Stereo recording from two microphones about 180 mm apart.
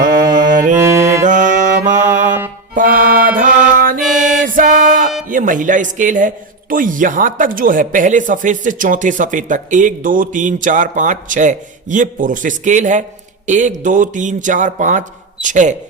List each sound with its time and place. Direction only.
0.3 s mantra: 45° right (ahead or behind)
0.8 s music: 15° right (ahead or behind)
1.2 s music: 45° right (ahead or behind)
5.3 s a man's voice: 45° right (ahead or behind)